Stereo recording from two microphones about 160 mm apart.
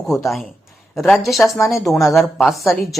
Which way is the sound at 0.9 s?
Centre (ahead or behind).